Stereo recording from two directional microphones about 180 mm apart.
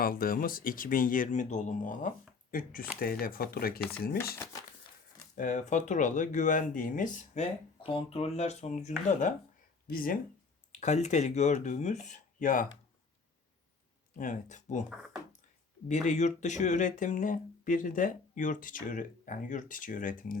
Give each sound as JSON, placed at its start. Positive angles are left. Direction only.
{"t": 0.0, "sound": "speech", "side_deg": 55}
{"t": 5.4, "sound": "speech", "side_deg": 45}
{"t": 7.9, "sound": "speech", "side_deg": 30}
{"t": 10.7, "sound": "speech", "side_deg": 40}
{"t": 14.2, "sound": "speech", "side_deg": 45}
{"t": 14.8, "sound": "speech", "side_deg": -5}
{"t": 15.9, "sound": "speech", "side_deg": 40}